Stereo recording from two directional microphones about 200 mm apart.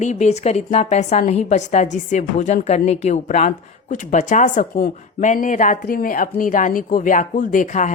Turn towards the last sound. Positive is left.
turn(degrees=40)  # may be behind; listen again after turning